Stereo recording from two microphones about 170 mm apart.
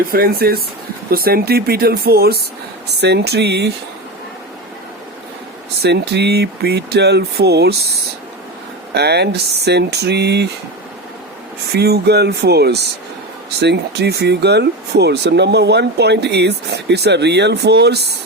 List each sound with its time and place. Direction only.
0.0 s speech: 60° right (ahead or behind)
3.0 s speech: 75° right (ahead or behind)
5.8 s speech: 80° right
8.9 s speech: 75° right (ahead or behind)
11.7 s speech: 70° right (ahead or behind)